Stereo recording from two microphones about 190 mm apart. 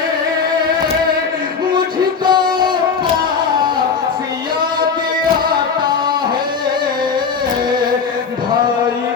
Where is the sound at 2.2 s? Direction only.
25° right (ahead or behind).